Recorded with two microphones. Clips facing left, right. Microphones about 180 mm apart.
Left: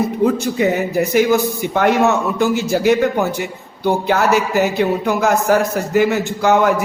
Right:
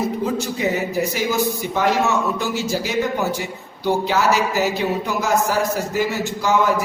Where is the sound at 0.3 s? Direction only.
55° left (ahead or behind).